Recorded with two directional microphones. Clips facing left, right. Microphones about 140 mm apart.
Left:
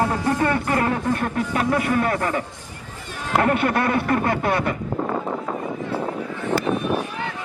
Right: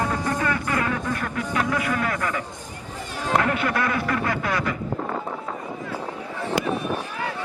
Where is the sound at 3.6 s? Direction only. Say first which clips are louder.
Left 3 dB; 30° left (ahead or behind).